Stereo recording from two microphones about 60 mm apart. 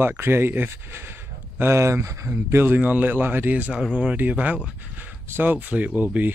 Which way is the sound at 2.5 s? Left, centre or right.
Right.